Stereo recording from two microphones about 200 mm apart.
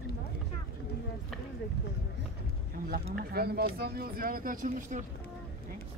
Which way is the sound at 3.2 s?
50° right (ahead or behind).